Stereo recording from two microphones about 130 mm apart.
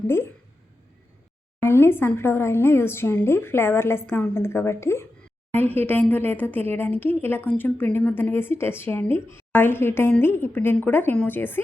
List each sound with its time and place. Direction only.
1.6 s a woman's voice: 20° left (ahead or behind)